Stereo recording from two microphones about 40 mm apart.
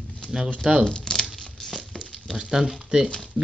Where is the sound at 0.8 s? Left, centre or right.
Centre.